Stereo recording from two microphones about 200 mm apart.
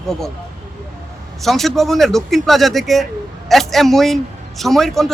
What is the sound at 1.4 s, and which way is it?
A man's voice, centre (ahead or behind).